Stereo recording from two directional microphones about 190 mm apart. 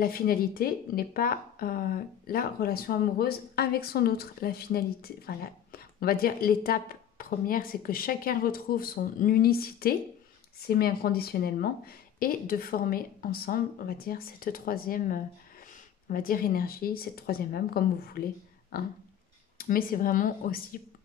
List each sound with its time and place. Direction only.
0.0 s speech: 50° left (ahead or behind)